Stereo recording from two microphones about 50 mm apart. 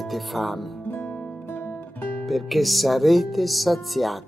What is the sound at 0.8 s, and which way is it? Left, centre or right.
Music, left.